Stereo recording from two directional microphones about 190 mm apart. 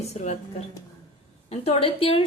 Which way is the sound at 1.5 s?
30° left (ahead or behind).